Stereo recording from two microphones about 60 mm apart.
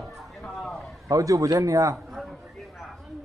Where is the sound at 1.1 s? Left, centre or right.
Right.